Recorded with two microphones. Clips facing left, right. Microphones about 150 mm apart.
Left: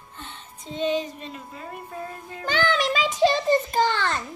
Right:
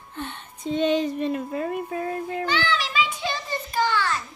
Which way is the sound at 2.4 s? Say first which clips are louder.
Left 5 dB; 50° left (ahead or behind).